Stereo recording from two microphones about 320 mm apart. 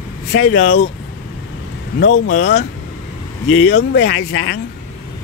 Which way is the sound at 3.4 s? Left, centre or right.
Left.